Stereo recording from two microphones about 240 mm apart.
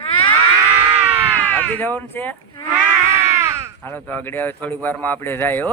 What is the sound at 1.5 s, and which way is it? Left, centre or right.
Speech, centre.